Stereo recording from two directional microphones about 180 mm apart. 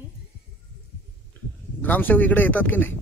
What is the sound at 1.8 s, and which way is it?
A man's voice, 10° left (ahead or behind).